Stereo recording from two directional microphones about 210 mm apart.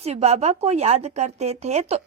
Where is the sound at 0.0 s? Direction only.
30° right (ahead or behind).